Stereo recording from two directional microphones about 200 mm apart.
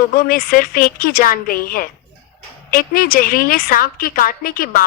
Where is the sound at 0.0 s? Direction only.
45° left (ahead or behind).